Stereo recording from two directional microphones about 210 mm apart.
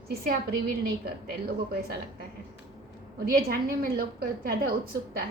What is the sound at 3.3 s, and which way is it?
A woman's voice, 45° right (ahead or behind).